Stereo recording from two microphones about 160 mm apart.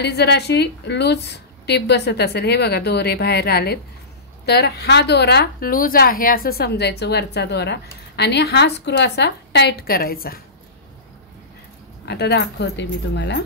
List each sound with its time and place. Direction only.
0.0 s a woman's voice: 90° left; by 10.4 s 70° left (ahead or behind)
12.1 s a woman's voice: 90° left